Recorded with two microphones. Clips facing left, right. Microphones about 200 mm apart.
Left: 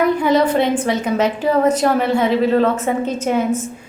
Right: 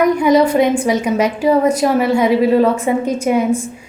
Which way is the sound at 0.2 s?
10° right (ahead or behind).